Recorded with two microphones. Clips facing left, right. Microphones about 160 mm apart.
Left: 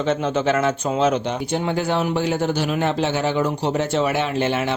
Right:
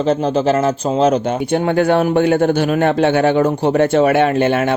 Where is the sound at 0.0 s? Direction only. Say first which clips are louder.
Right 5 dB; 35° right (ahead or behind).